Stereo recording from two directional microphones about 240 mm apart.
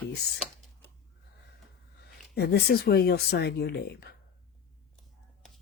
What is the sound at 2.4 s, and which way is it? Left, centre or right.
Speech, left.